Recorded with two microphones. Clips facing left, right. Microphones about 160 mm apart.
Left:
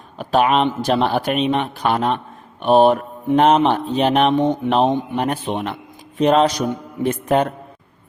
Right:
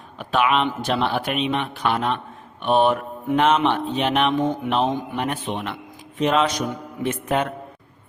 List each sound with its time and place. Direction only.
0.2 s mantra: 40° left (ahead or behind)